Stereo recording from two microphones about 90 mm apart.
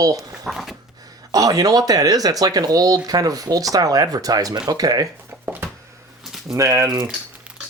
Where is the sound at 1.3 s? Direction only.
45° right (ahead or behind).